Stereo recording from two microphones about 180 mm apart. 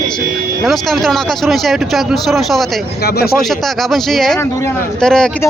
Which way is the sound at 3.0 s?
60° left (ahead or behind).